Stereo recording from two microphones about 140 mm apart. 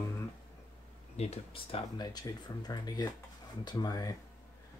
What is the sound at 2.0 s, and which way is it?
Speech, 25° left (ahead or behind).